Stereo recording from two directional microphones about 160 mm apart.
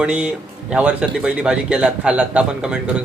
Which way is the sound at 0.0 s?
5° right (ahead or behind).